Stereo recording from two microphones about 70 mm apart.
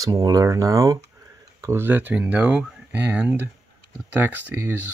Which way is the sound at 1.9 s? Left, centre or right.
Right.